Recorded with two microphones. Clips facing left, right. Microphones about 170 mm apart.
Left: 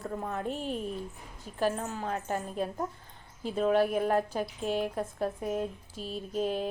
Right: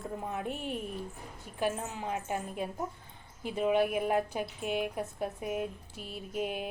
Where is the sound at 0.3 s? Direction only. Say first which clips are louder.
Left 2 dB; 15° right (ahead or behind).